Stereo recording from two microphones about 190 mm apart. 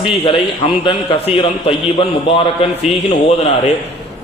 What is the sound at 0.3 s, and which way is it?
A man's voice, 25° left (ahead or behind).